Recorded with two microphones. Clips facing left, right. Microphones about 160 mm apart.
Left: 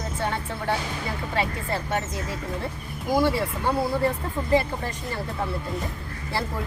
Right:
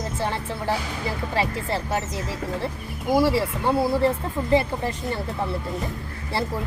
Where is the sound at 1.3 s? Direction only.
30° right (ahead or behind).